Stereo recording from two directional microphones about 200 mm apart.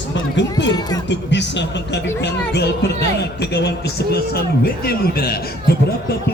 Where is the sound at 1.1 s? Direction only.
60° left (ahead or behind).